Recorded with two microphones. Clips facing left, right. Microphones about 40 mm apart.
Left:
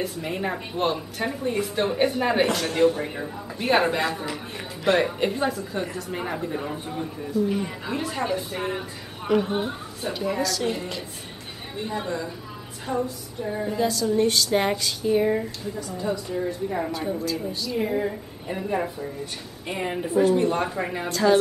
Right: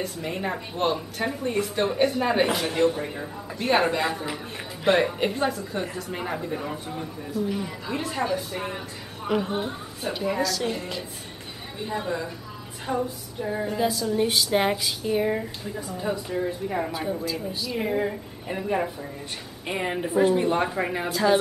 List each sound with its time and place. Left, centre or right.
0.0 s a woman's voice: centre
2.4 s a woman's voice: centre
2.7 s a woman's voice: centre
7.4 s speech: centre
7.9 s speech: centre
10.0 s a woman's voice: centre
12.8 s music: centre
13.6 s a woman's voice: centre